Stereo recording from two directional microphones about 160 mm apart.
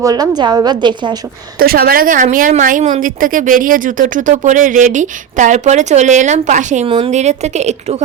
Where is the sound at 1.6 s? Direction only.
65° right (ahead or behind); by 6.9 s 50° right (ahead or behind).